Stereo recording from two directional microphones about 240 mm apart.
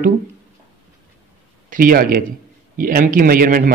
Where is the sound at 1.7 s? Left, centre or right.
Right.